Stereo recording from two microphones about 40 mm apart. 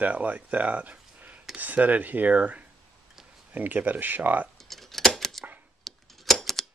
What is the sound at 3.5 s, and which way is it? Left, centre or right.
Speech, right.